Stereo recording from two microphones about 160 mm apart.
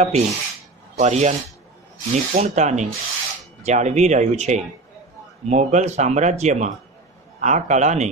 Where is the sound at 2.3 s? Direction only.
45° right (ahead or behind).